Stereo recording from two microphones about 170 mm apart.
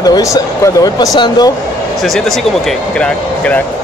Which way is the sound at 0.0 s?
20° left (ahead or behind).